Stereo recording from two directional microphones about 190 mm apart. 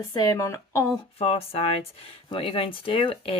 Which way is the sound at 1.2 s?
30° left (ahead or behind).